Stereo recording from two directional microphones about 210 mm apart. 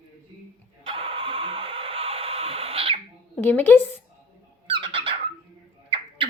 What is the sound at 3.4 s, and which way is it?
Speech, 10° left (ahead or behind).